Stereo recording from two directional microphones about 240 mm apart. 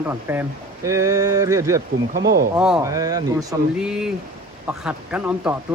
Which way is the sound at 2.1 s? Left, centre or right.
Right.